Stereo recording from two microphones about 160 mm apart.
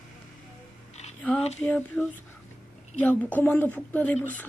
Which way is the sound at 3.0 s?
10° left (ahead or behind).